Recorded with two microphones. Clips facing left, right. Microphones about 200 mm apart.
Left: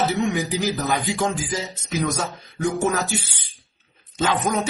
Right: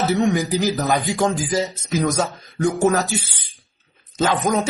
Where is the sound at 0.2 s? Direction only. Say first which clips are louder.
Right 4 dB; 35° right (ahead or behind).